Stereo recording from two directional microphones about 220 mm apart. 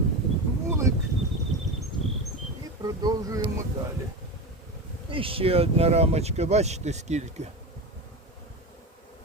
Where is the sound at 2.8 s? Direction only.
15° right (ahead or behind).